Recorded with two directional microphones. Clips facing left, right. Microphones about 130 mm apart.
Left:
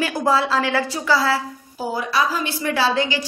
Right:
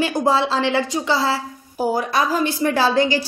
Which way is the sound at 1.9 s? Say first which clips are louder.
Right 1 dB; 45° right (ahead or behind).